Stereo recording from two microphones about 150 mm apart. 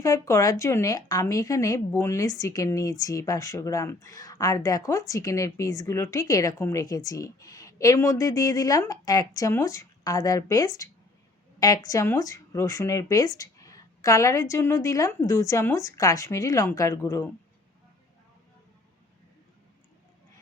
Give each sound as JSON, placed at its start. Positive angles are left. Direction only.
{"t": 0.0, "sound": "speech", "side_deg": 20}